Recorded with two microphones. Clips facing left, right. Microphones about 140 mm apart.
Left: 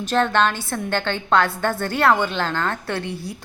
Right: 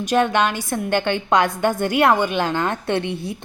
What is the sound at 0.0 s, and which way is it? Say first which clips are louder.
A woman's voice: right 1 dB; 15° right (ahead or behind).